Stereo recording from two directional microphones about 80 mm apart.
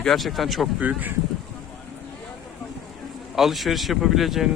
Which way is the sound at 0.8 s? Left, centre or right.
Right.